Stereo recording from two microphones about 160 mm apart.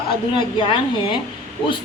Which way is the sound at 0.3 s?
30° left (ahead or behind).